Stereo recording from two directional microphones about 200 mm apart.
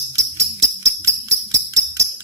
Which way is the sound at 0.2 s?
15° right (ahead or behind).